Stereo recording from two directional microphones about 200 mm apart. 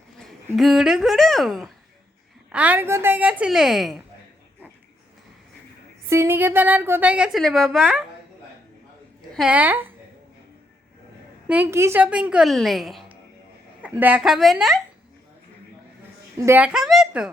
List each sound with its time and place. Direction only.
0.2 s a woman's voice: centre (ahead or behind)
6.1 s a woman's voice: 10° right (ahead or behind)
9.3 s a woman's voice: 5° right (ahead or behind)
11.4 s a woman's voice: 10° right (ahead or behind)
16.5 s a woman's voice: 5° right (ahead or behind)